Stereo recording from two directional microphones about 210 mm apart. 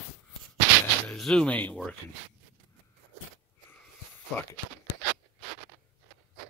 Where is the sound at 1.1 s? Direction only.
5° left (ahead or behind).